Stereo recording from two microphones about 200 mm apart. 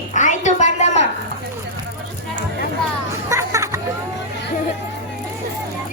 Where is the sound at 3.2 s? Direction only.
15° right (ahead or behind).